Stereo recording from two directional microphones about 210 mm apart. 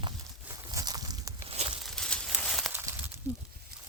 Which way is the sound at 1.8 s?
Centre (ahead or behind).